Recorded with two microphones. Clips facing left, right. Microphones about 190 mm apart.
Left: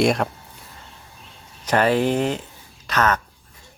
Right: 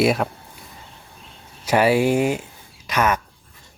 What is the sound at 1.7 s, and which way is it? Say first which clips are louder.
Speech: right 2 dB; 10° right (ahead or behind).